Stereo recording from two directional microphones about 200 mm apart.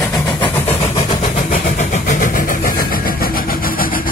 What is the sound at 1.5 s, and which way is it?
Vehicle, 40° left (ahead or behind).